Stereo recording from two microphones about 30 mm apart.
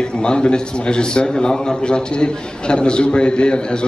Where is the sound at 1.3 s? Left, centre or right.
Centre.